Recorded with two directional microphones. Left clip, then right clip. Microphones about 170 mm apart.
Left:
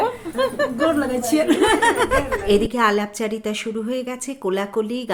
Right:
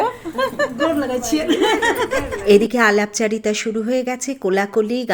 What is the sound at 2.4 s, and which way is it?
A woman's voice, 30° right (ahead or behind).